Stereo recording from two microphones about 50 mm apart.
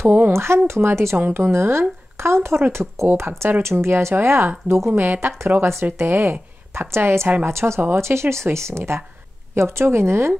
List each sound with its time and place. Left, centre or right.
0.0 s a woman's voice: right
0.3 s speech: right
1.1 s a woman's voice: right
5.6 s speech: right